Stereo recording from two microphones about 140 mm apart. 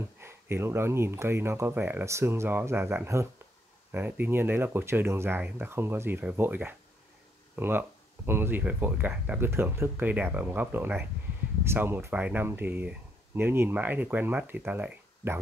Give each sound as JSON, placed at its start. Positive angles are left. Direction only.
{"t": 0.2, "sound": "speech", "side_deg": -15}